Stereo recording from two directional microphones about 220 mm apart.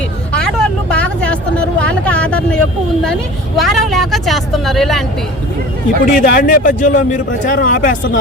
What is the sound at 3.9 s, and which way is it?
Speech, centre (ahead or behind).